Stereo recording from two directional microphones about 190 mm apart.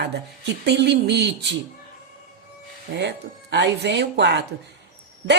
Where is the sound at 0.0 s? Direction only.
65° right (ahead or behind).